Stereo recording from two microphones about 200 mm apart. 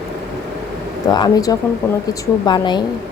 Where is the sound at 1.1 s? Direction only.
20° left (ahead or behind).